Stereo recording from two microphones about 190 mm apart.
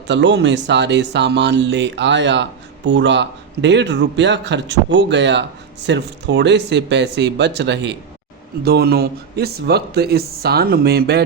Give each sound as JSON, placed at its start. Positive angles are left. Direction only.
{"t": 0.1, "sound": "speech", "side_deg": -70}
{"t": 8.6, "sound": "speech", "side_deg": -55}